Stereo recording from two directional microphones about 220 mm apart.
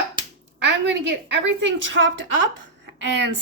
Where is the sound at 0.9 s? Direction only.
55° right (ahead or behind).